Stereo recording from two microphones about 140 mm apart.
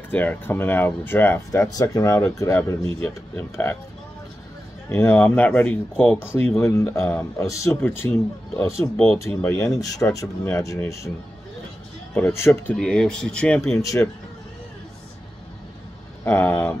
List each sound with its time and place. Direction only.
0.1 s speech: 10° left (ahead or behind)
4.8 s speech: 20° left (ahead or behind)
9.2 s speech: 20° left (ahead or behind)
12.1 s speech: 15° left (ahead or behind)
12.7 s speech: 5° left (ahead or behind)
13.6 s speech: 20° left (ahead or behind)
16.3 s speech: 20° left (ahead or behind)